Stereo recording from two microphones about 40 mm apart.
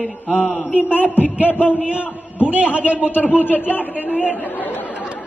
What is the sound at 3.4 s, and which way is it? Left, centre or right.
Speech, left.